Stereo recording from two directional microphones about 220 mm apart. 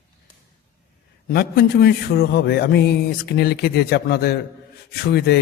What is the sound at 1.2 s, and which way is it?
A man's voice, 45° left (ahead or behind).